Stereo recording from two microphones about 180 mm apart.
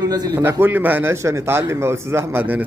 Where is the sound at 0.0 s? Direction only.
20° right (ahead or behind).